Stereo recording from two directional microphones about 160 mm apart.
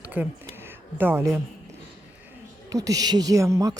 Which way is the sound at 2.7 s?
20° right (ahead or behind).